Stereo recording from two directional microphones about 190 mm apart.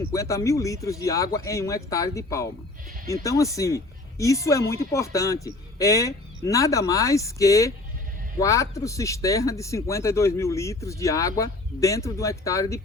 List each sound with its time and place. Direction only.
0.0 s speech: 15° left (ahead or behind)